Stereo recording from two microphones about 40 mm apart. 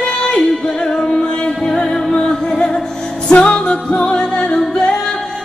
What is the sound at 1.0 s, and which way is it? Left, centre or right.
Music, left.